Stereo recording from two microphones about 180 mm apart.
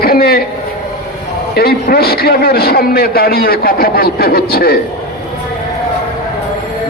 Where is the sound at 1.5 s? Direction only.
60° left (ahead or behind).